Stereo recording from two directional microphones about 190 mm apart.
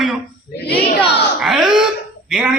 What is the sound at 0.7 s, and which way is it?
Speech, 60° left (ahead or behind).